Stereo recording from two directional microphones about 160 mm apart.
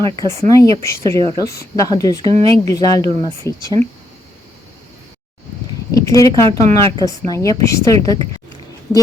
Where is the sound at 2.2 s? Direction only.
35° right (ahead or behind).